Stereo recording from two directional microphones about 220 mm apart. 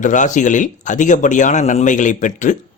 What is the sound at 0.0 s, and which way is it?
Speech, 35° left (ahead or behind).